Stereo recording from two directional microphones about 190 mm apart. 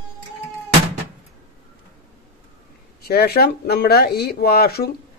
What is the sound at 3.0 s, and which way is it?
Speech, 55° left (ahead or behind).